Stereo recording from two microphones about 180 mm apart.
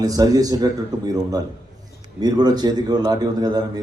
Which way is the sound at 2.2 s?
20° right (ahead or behind).